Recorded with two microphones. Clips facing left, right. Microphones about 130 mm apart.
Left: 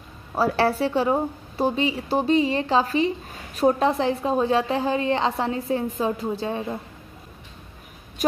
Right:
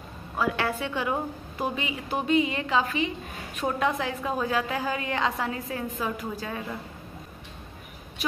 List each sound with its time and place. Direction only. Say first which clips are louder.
0.4 s a woman's voice: left 6 dB; 35° left (ahead or behind)
8.2 s speech: left 9 dB; 45° left (ahead or behind)